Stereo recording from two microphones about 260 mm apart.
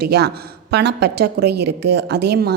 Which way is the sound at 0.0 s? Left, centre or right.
Right.